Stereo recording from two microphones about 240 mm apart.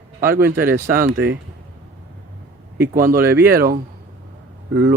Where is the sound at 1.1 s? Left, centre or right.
Right.